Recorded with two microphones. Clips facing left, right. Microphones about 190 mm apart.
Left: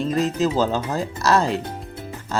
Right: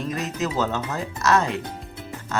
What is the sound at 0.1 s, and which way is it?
Speech, 30° left (ahead or behind).